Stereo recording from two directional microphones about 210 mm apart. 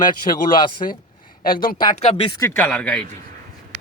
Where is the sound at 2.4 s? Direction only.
5° left (ahead or behind).